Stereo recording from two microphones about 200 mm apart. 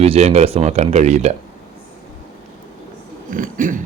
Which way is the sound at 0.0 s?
30° right (ahead or behind).